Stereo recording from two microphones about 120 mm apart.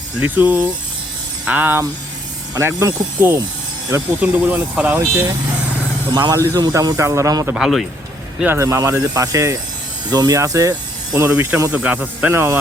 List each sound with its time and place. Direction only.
0.2 s speech: 15° right (ahead or behind)
6.1 s speech: 30° right (ahead or behind)
7.5 s a man's voice: centre (ahead or behind)
8.4 s speech: 25° right (ahead or behind)